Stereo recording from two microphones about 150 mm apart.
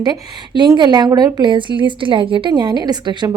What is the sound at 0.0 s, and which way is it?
A woman's voice, 30° right (ahead or behind).